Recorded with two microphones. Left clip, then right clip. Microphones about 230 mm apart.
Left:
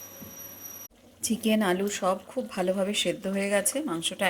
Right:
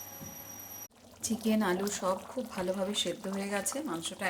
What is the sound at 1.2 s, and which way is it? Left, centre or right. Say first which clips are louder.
Speech: left 5 dB; centre.